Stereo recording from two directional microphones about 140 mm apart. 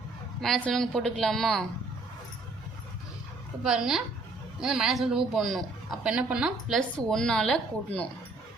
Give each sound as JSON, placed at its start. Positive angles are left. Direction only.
{"t": 0.4, "sound": "a woman's voice", "side_deg": 5}
{"t": 3.6, "sound": "a woman's voice", "side_deg": -5}
{"t": 6.9, "sound": "a woman's voice", "side_deg": 5}